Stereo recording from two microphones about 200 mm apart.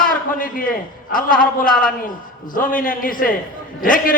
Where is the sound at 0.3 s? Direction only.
45° left (ahead or behind).